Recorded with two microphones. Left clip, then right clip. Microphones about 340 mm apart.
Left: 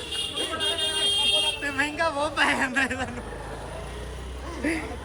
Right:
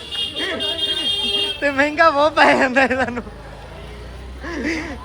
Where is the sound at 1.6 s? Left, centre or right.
Centre.